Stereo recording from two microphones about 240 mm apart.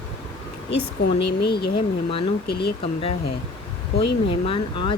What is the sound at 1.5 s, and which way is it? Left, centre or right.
Speech, left.